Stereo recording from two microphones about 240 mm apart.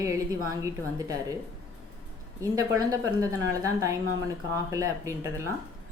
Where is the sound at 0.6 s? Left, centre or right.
Centre.